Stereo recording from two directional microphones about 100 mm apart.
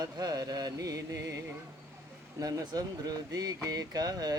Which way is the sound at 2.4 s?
40° right (ahead or behind).